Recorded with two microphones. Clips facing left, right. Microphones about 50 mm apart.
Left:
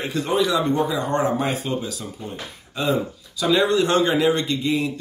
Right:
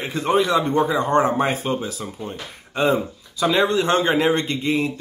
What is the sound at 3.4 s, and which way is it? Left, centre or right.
Speech, right.